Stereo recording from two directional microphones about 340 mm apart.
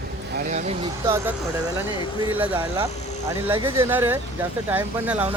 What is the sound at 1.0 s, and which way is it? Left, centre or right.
A man's voice, centre.